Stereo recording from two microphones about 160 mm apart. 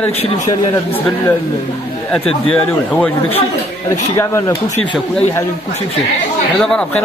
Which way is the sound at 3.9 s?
15° left (ahead or behind).